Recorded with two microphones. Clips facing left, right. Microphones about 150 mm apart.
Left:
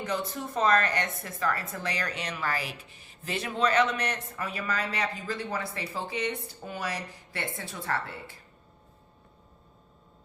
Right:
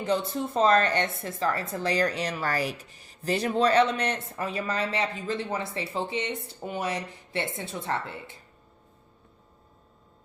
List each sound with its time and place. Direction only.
0.0 s a woman's voice: 30° right (ahead or behind)